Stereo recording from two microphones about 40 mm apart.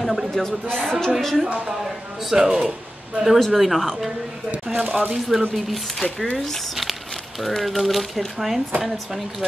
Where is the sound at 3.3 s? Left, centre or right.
Centre.